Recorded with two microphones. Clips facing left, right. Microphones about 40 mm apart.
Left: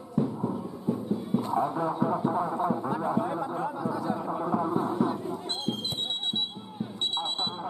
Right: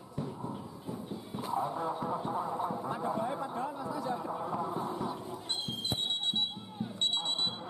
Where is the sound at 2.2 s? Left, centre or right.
Left.